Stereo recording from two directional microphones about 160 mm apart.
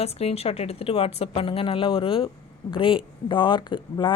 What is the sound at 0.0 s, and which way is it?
Speech, 40° left (ahead or behind).